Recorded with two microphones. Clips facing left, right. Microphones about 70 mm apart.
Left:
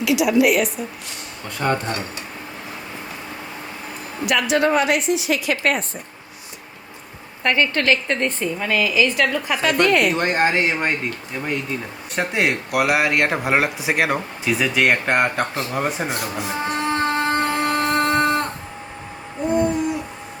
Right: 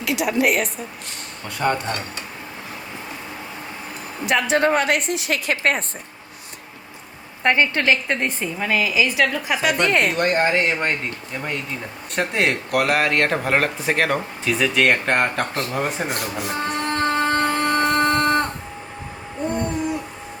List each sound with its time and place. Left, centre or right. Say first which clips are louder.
0.0 s a woman's voice: left 4 dB; right
1.5 s speech: right 1 dB; centre
4.3 s a woman's voice: even; right
7.4 s a woman's voice: right 1 dB; right; by 9.6 s centre
9.6 s a woman's voice: left 2 dB; right
10.2 s speech: even; left
12.1 s speech: even; centre
14.5 s a sound: even; centre